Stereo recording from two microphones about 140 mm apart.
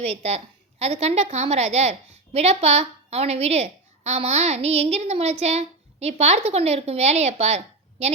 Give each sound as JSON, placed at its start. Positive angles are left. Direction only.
{"t": 0.0, "sound": "a woman's voice", "side_deg": -50}